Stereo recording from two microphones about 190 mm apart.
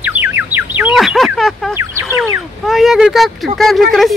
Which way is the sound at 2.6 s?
Centre (ahead or behind).